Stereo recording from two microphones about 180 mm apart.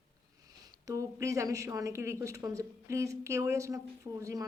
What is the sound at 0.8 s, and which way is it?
Speech, 20° right (ahead or behind).